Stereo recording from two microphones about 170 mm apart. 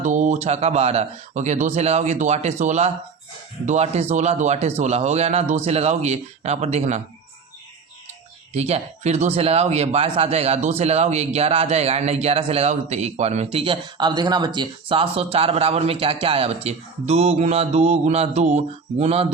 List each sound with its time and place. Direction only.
0.0 s speech: 45° right (ahead or behind)
8.5 s speech: 40° right (ahead or behind)